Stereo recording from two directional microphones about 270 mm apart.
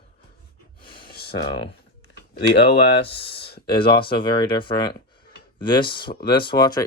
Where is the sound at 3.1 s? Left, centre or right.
Left.